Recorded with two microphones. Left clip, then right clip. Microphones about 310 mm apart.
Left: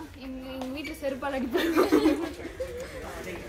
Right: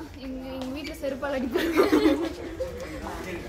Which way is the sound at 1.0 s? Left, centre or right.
Centre.